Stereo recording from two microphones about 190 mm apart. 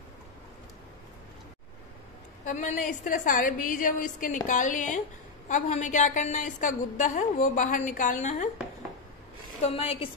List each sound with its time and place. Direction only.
2.4 s a woman's voice: 40° left (ahead or behind)
9.6 s a woman's voice: 30° left (ahead or behind)